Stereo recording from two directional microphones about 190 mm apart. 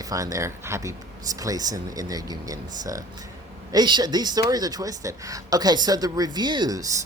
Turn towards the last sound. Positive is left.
turn(degrees=-20)  # may be behind; listen again after turning